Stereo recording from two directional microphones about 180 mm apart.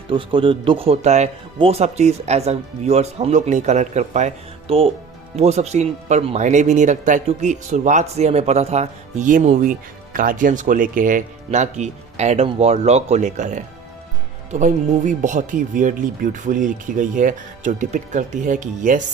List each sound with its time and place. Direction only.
0.1 s speech: 30° right (ahead or behind)
5.4 s speech: 35° right (ahead or behind)